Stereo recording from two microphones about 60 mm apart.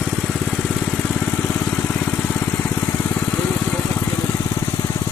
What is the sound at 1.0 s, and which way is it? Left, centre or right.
Vehicle, centre.